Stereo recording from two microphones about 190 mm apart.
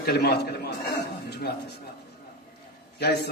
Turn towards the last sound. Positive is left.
turn(degrees=60)  # may be behind; listen again after turning